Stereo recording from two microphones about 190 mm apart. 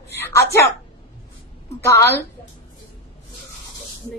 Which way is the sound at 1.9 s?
15° left (ahead or behind).